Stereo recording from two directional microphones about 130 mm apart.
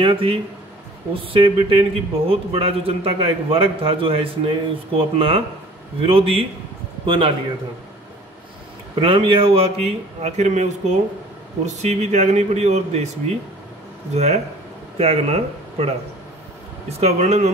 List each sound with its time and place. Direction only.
0.0 s a man's voice: 45° right (ahead or behind)
9.0 s a man's voice: 45° right (ahead or behind); by 13.1 s 60° right (ahead or behind)
14.1 s speech: 60° right (ahead or behind)
16.9 s speech: 55° right (ahead or behind)